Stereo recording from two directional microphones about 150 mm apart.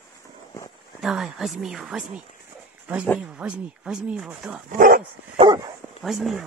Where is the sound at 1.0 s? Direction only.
Centre (ahead or behind).